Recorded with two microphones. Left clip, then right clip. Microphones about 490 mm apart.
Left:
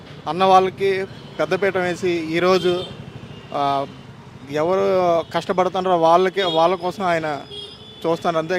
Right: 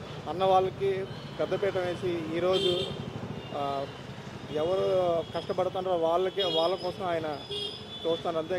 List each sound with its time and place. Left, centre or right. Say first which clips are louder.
0.3 s speech: left 10 dB; left
3.6 s speech: left 12 dB; left